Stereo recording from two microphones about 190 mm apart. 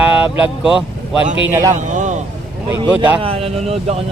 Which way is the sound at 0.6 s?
Centre (ahead or behind).